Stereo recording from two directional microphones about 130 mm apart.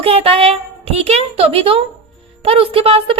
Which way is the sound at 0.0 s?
50° right (ahead or behind).